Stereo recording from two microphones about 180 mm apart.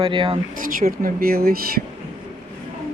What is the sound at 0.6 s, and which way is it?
Speech, 50° right (ahead or behind).